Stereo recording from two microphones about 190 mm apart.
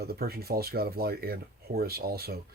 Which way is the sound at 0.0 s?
55° right (ahead or behind).